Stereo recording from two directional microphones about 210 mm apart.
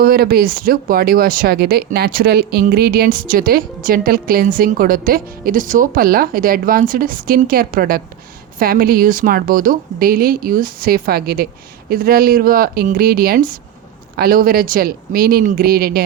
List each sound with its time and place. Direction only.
0.0 s speech: 45° right (ahead or behind)